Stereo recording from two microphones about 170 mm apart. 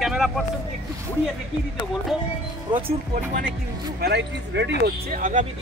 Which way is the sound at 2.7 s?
25° right (ahead or behind).